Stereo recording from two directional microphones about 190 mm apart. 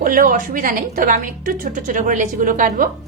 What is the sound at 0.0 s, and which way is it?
A woman's voice, 45° right (ahead or behind).